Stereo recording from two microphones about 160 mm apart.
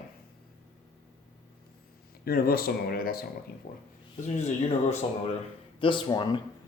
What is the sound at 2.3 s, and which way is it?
Speech, 70° left (ahead or behind).